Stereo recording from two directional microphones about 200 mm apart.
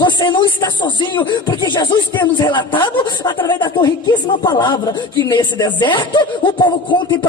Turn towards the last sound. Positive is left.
turn(degrees=25)  # may be behind; listen again after turning